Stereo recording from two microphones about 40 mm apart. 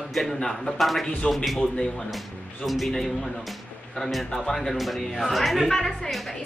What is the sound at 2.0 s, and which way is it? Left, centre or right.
A man's voice, centre.